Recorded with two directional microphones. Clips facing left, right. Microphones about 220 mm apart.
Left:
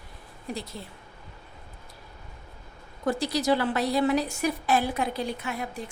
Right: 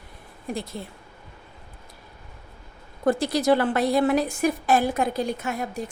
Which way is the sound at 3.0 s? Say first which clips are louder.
Right 4 dB; 50° right (ahead or behind).